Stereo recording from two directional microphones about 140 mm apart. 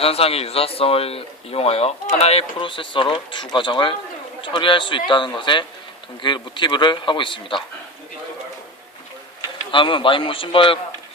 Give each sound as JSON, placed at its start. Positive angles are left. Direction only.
{"t": 0.0, "sound": "a man's voice", "side_deg": 45}
{"t": 9.7, "sound": "a man's voice", "side_deg": 35}